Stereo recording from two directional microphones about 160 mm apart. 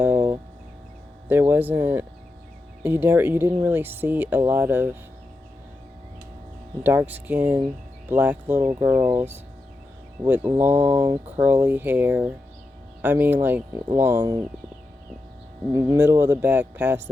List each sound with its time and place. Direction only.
1.3 s speech: 15° right (ahead or behind)
6.8 s speech: 10° right (ahead or behind)
10.2 s speech: 10° right (ahead or behind)
14.2 s speech: 25° right (ahead or behind)
15.7 s speech: 20° right (ahead or behind)